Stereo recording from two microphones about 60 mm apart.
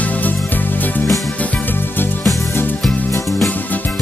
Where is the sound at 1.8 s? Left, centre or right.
Left.